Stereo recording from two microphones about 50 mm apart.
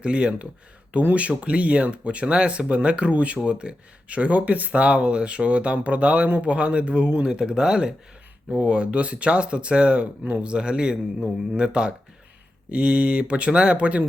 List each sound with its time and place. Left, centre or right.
0.0 s speech: right
8.5 s speech: right